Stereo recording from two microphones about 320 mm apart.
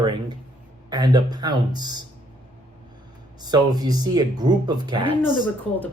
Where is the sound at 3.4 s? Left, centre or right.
Centre.